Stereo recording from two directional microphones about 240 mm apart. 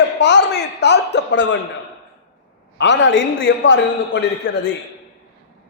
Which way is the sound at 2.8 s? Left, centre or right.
Left.